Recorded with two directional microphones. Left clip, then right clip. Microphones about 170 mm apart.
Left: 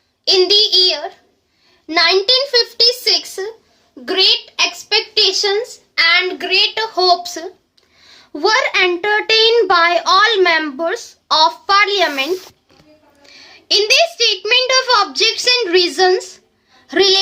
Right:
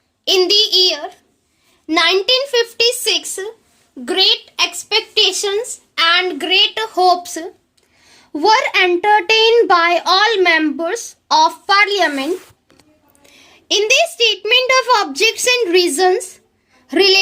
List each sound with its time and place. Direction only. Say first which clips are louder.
0.3 s child singing: left 1 dB; 40° right (ahead or behind)
2.1 s a child's voice: left 1 dB; 45° right (ahead or behind); by 5.0 s 60° right (ahead or behind)
5.9 s a child's voice: left 1 dB; 50° right (ahead or behind)
13.3 s a sound: left 6 dB; 40° right (ahead or behind)
13.7 s a child's voice: left 1 dB; 40° right (ahead or behind)